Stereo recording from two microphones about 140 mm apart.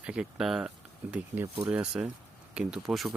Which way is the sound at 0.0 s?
5° right (ahead or behind).